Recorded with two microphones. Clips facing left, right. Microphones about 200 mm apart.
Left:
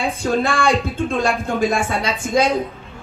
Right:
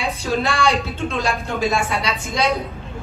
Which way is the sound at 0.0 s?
50° left (ahead or behind).